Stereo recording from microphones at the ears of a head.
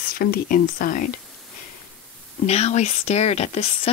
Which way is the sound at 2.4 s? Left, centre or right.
Left.